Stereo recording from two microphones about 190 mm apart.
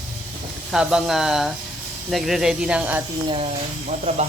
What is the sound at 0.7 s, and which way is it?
Speech, 5° right (ahead or behind).